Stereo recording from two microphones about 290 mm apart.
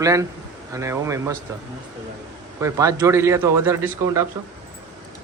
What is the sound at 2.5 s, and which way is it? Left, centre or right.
A man's voice, centre.